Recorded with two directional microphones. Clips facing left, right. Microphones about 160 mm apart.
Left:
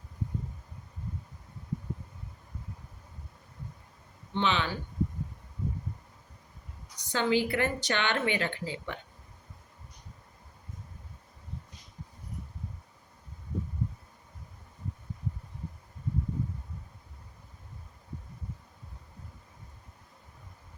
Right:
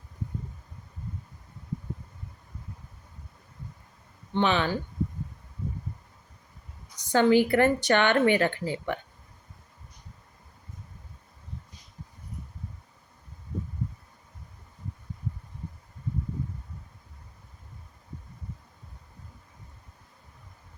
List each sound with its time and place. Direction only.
4.4 s speech: 50° right (ahead or behind)
7.1 s a woman's voice: 50° right (ahead or behind)